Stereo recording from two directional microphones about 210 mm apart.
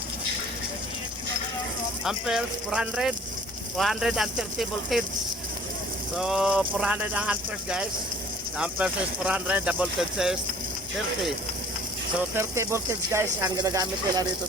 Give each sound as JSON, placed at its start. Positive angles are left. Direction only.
{"t": 2.0, "sound": "speech", "side_deg": 0}
{"t": 6.1, "sound": "speech", "side_deg": -5}
{"t": 12.3, "sound": "speech", "side_deg": -10}